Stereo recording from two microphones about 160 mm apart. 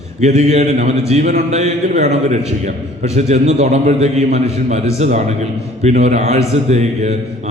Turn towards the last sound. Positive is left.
turn(degrees=-45)  # may be behind; listen again after turning